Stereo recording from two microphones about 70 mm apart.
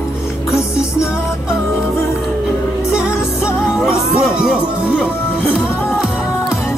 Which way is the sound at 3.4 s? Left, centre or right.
Centre.